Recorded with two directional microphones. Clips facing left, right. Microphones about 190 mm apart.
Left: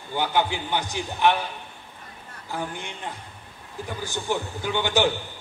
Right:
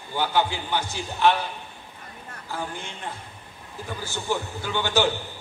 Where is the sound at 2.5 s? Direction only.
15° left (ahead or behind).